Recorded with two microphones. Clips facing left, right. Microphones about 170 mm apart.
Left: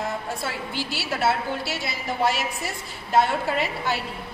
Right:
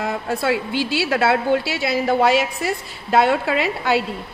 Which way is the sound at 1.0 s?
90° right.